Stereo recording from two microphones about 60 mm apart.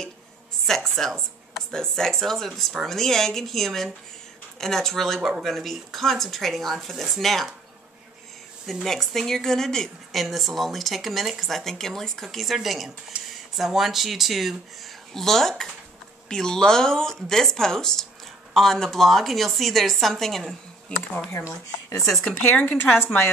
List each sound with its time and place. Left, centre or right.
0.7 s speech: centre
8.8 s speech: centre
13.1 s speech: centre
13.6 s speech: centre
20.9 s speech: left
21.5 s speech: left
22.2 s speech: left